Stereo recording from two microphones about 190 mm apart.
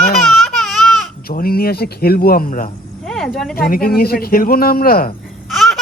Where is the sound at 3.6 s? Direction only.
50° left (ahead or behind).